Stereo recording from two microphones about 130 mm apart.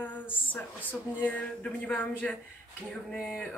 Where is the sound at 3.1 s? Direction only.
5° left (ahead or behind).